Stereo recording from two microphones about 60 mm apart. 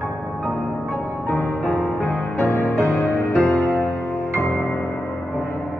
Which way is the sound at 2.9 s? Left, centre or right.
Left.